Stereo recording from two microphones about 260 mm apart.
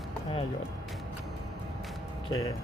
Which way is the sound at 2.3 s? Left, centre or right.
Centre.